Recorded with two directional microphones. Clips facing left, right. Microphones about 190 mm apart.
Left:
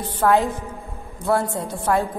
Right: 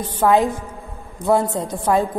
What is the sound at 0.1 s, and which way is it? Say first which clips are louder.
A woman's voice: right 2 dB; 15° right (ahead or behind).